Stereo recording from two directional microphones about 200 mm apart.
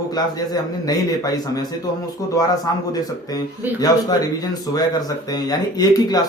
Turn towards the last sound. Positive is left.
turn(degrees=20)  # may be behind; listen again after turning